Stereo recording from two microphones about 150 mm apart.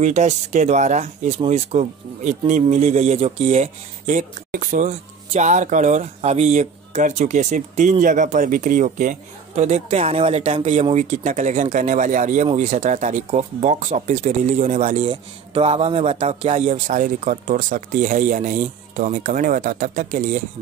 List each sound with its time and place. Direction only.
0.0 s speech: 50° right (ahead or behind)